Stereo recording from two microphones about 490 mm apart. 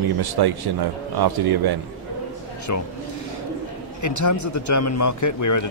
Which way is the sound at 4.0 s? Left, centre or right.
Left.